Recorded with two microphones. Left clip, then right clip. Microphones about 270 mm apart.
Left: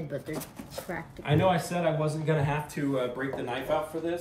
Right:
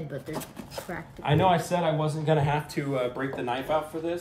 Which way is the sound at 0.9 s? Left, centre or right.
Centre.